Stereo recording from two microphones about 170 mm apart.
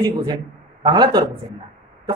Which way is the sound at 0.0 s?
25° right (ahead or behind).